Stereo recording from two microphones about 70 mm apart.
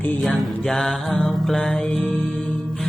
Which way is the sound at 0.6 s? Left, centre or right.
Centre.